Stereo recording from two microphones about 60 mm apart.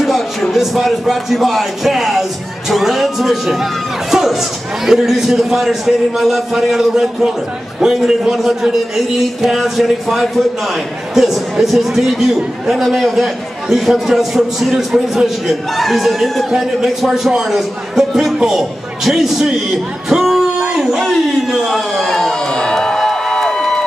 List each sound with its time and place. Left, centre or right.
0.0 s a man's voice: centre
16.4 s speech: centre
20.1 s music: centre
20.7 s a sound: centre